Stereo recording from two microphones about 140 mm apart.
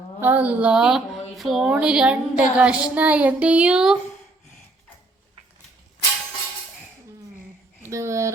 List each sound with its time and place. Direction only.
0.2 s a woman's voice: 10° right (ahead or behind)
7.9 s speech: 20° right (ahead or behind)